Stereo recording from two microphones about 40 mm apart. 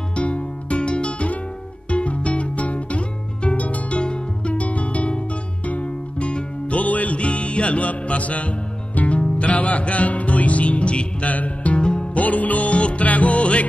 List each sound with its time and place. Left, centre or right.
0.1 s music: left
4.0 s music: left
4.6 s music: left
11.8 s music: left
12.1 s music: left